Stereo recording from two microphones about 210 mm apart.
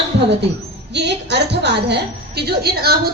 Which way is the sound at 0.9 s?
55° right (ahead or behind).